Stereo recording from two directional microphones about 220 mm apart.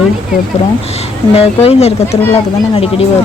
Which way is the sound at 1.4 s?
30° left (ahead or behind).